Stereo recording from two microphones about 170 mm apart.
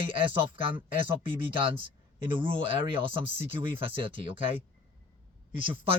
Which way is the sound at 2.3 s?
30° right (ahead or behind).